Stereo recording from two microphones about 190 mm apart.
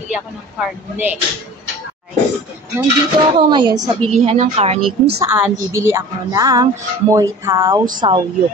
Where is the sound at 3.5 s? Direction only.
25° right (ahead or behind).